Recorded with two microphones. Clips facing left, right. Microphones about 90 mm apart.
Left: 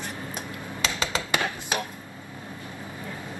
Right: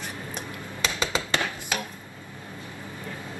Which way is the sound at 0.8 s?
15° right (ahead or behind).